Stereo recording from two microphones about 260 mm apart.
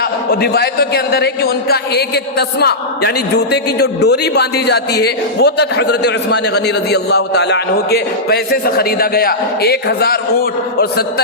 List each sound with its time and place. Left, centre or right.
0.0 s a man's voice: left